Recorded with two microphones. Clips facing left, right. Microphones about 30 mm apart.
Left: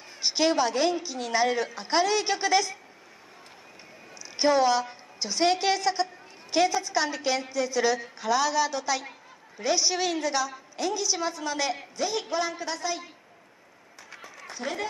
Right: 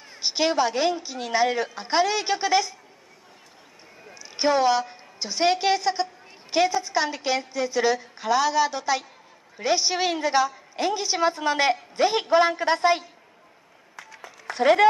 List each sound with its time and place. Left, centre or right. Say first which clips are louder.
0.2 s a woman's voice: right 1 dB; centre
4.2 s a woman's voice: right 1 dB; centre; by 13.0 s right
14.5 s speech: right 15 dB; right